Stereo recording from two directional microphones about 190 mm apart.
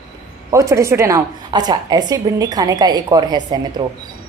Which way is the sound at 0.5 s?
15° right (ahead or behind).